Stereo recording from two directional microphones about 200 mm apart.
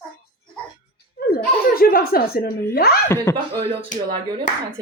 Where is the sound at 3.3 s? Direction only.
10° left (ahead or behind).